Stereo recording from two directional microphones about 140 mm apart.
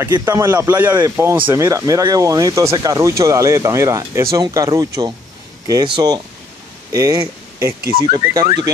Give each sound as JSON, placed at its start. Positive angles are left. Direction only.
{"t": 0.1, "sound": "speech", "side_deg": -25}